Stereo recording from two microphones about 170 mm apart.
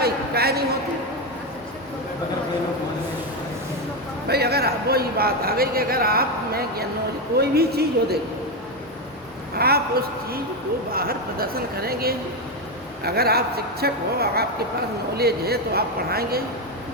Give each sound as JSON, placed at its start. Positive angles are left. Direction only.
{"t": 0.0, "sound": "a sound", "side_deg": -65}
{"t": 4.3, "sound": "a man's voice", "side_deg": -70}
{"t": 9.6, "sound": "a woman's voice", "side_deg": -65}